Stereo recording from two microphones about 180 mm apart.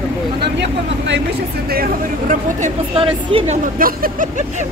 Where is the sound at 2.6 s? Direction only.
35° right (ahead or behind).